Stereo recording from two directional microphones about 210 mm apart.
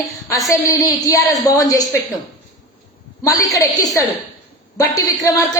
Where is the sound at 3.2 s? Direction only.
15° left (ahead or behind).